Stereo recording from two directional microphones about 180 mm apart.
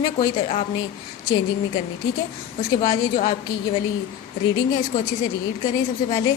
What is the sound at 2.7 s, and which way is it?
Speech, 25° left (ahead or behind).